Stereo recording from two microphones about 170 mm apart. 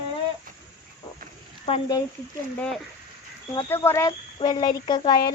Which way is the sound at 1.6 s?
35° left (ahead or behind).